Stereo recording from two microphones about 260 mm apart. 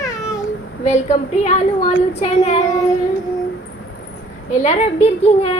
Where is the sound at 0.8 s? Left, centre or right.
Left.